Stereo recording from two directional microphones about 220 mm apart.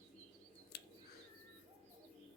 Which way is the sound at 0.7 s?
45° left (ahead or behind).